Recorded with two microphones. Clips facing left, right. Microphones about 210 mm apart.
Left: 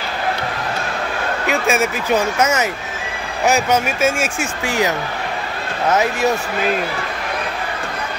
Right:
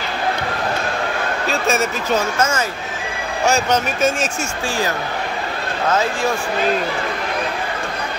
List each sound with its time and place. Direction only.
1.5 s speech: 10° left (ahead or behind)